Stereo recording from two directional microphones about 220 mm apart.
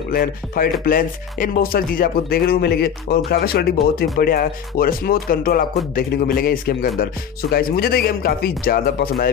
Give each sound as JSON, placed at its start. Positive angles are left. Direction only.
{"t": 0.1, "sound": "music", "side_deg": 40}
{"t": 7.5, "sound": "speech", "side_deg": 45}